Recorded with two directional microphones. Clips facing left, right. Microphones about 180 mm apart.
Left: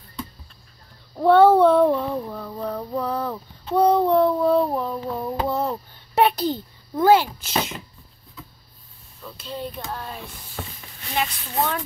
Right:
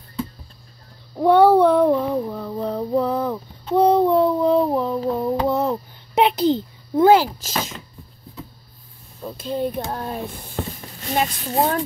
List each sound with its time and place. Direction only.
1.1 s child singing: 15° right (ahead or behind)
5.1 s a sound: 15° right (ahead or behind)
9.4 s speech: 50° right (ahead or behind)
11.1 s speech: 40° right (ahead or behind)